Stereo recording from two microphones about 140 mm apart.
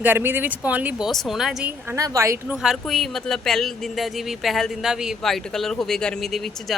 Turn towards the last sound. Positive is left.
turn(degrees=0)  # may be behind; listen again after turning